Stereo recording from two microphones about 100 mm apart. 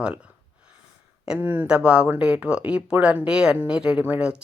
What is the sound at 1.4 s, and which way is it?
Speech, 20° right (ahead or behind).